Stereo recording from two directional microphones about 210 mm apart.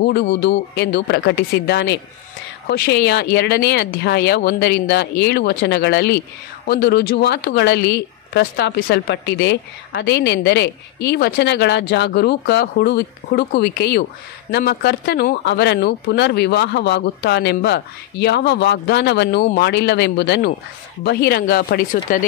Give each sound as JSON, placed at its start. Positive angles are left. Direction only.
{"t": 0.0, "sound": "speech", "side_deg": 55}